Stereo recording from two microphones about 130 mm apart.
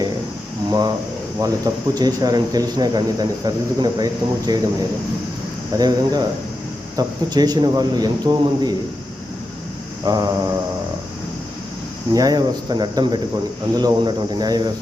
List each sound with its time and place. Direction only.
0.7 s speech: 30° right (ahead or behind)
5.7 s speech: 30° right (ahead or behind)
10.1 s mantra: 30° right (ahead or behind)
12.1 s speech: 30° right (ahead or behind)